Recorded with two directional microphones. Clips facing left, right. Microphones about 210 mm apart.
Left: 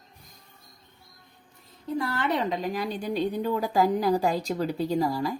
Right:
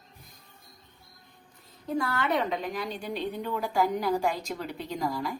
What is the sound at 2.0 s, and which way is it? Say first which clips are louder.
A woman's voice: left 1 dB; 30° left (ahead or behind).